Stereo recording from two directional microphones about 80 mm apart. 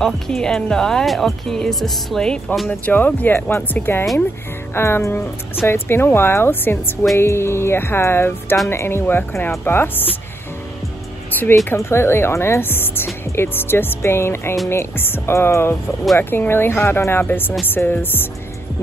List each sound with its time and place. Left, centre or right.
0.0 s speech: centre
2.7 s speech: centre
11.7 s speech: left